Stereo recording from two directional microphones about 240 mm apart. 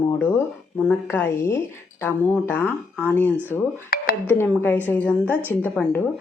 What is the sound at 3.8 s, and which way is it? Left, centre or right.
Music, left.